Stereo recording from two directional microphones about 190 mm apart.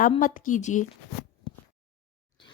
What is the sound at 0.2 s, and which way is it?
Speech, 45° left (ahead or behind).